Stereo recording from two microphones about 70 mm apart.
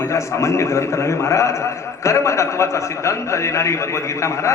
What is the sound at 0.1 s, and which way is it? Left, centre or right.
A man's voice, left.